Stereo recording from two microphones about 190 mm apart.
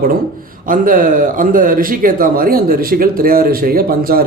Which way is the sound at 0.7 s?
45° right (ahead or behind).